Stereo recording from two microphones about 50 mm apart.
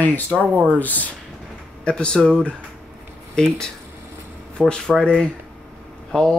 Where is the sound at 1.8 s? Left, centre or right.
Centre.